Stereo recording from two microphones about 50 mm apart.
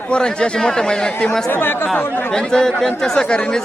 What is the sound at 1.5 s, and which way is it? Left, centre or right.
Speech, left.